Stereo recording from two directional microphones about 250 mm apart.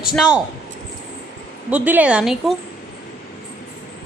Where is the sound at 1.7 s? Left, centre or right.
Centre.